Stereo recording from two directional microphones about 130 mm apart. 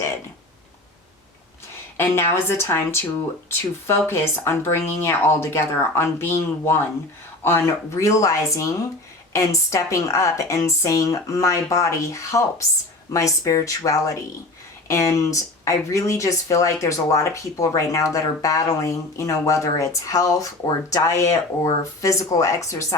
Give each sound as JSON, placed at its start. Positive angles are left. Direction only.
{"t": 2.0, "sound": "speech", "side_deg": 20}